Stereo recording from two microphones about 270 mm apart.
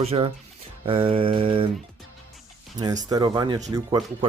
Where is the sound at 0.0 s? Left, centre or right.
Right.